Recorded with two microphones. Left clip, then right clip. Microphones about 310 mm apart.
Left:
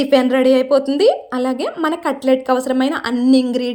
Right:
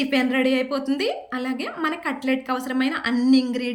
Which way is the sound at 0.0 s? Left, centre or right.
Centre.